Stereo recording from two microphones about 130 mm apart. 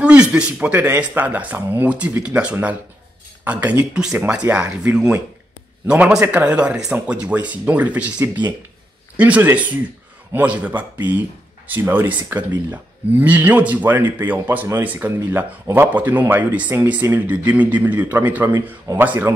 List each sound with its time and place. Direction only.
0.0 s speech: 10° right (ahead or behind)